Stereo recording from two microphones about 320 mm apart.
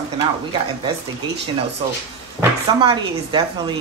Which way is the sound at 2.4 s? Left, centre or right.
Centre.